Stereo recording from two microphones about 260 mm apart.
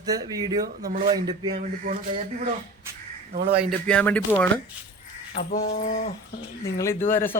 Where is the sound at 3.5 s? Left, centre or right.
Centre.